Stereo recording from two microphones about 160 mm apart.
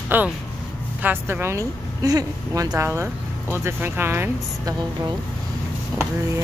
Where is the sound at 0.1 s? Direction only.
10° right (ahead or behind).